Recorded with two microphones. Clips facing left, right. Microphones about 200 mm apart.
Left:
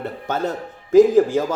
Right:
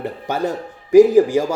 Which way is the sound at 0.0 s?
15° right (ahead or behind).